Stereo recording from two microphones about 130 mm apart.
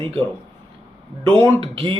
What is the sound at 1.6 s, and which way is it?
Speech, 40° right (ahead or behind).